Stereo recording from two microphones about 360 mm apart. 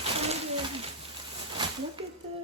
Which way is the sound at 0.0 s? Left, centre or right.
Centre.